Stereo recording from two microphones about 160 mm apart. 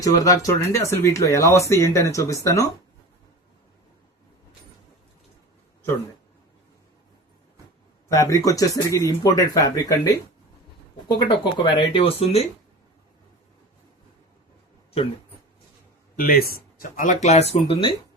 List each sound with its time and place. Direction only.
0.0 s speech: 20° left (ahead or behind)
8.1 s speech: 20° left (ahead or behind)
11.1 s speech: 30° left (ahead or behind)
16.1 s speech: 65° left (ahead or behind); by 17.9 s 35° left (ahead or behind)